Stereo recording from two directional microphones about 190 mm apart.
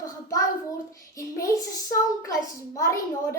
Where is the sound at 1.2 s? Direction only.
15° left (ahead or behind).